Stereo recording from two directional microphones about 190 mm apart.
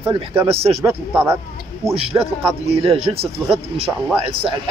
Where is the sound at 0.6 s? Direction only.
30° right (ahead or behind).